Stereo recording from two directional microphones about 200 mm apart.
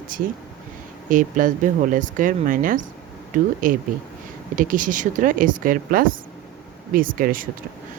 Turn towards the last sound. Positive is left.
turn(degrees=-45)  # may be behind; listen again after turning